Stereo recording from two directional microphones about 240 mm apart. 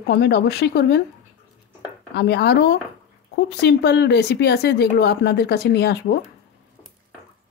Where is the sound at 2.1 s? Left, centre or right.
Left.